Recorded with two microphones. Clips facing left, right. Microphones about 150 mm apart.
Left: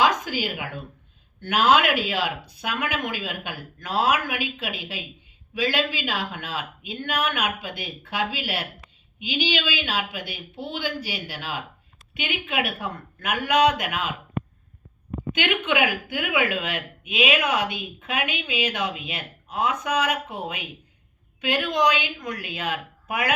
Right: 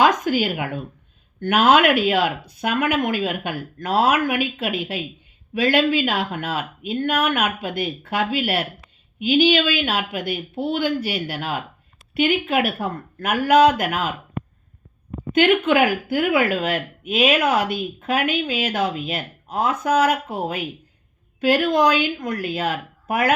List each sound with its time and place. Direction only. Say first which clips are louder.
0.0 s a sound: right 5 dB; 50° right (ahead or behind)
1.4 s speech: right 4 dB; 50° right (ahead or behind)
15.4 s speech: right 8 dB; 45° right (ahead or behind)